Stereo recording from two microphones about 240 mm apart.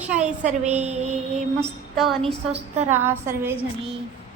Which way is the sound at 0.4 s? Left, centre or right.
Right.